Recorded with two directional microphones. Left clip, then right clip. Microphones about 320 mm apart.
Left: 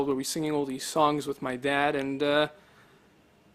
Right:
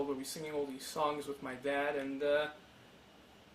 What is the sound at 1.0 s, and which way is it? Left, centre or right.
Speech, left.